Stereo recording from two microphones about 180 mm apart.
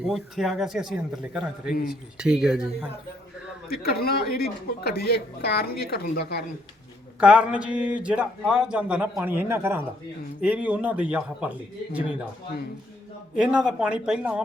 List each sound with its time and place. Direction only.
0.0 s a man's voice: centre (ahead or behind)
3.7 s speech: 60° left (ahead or behind)
7.2 s a man's voice: 5° right (ahead or behind)
13.3 s a man's voice: 5° right (ahead or behind)